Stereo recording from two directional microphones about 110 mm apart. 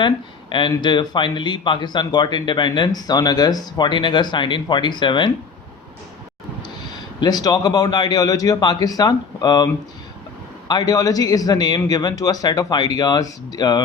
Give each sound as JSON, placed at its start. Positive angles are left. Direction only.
{"t": 0.8, "sound": "speech", "side_deg": 45}
{"t": 7.2, "sound": "a man's voice", "side_deg": 40}
{"t": 10.7, "sound": "a man's voice", "side_deg": 35}